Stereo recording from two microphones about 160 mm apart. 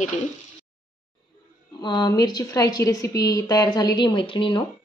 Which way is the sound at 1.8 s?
25° left (ahead or behind).